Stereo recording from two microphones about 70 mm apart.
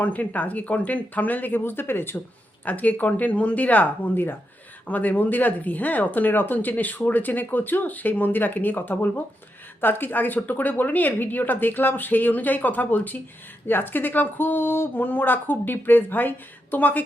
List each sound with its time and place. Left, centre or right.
0.0 s speech: left